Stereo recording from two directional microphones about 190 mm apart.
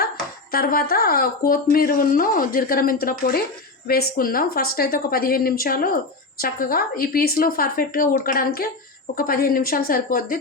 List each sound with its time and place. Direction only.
0.5 s speech: 50° left (ahead or behind)